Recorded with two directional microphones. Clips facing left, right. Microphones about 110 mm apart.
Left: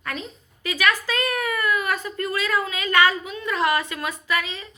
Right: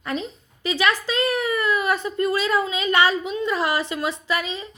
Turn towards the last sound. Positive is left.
turn(degrees=-25)  # may be behind; listen again after turning